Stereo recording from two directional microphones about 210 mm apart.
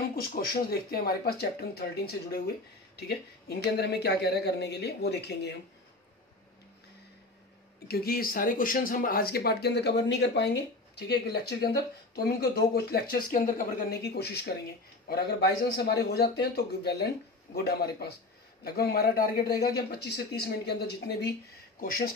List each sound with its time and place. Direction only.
0.1 s speech: 45° left (ahead or behind)
7.9 s speech: 45° left (ahead or behind)
19.5 s speech: 15° left (ahead or behind)
19.9 s speech: 50° left (ahead or behind)